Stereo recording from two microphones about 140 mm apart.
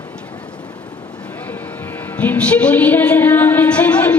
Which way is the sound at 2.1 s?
10° left (ahead or behind).